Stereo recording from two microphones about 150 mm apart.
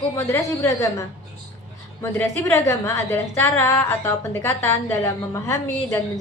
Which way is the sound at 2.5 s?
20° left (ahead or behind).